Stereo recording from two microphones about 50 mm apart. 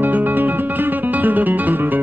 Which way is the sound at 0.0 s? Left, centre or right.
Right.